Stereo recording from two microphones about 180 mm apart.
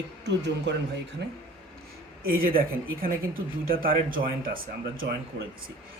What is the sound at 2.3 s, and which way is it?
Speech, 55° right (ahead or behind).